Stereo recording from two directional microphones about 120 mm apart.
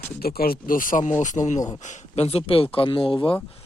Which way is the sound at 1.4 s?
20° left (ahead or behind).